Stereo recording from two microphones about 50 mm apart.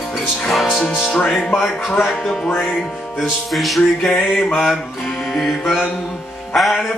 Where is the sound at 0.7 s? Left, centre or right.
Centre.